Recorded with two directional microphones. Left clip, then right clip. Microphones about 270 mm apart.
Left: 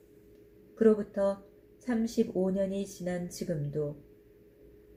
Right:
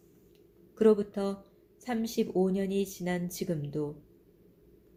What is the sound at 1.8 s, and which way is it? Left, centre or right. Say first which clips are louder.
Speech: left 1 dB; right.